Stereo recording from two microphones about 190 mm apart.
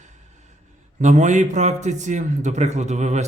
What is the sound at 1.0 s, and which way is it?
Speech, 40° right (ahead or behind).